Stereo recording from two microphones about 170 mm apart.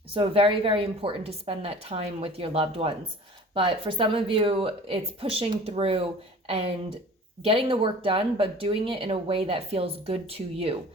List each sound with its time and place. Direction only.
0.1 s speech: 30° right (ahead or behind)